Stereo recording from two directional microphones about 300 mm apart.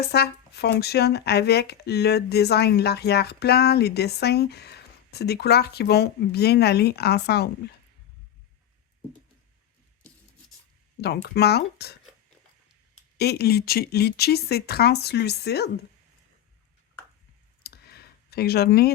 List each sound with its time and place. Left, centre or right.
0.0 s speech: left
11.0 s speech: left
13.1 s speech: left
17.6 s clicking: left